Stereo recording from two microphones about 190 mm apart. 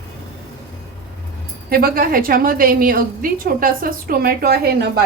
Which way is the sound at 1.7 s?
50° right (ahead or behind).